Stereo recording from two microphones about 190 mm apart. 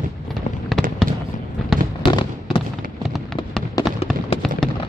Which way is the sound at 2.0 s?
25° left (ahead or behind).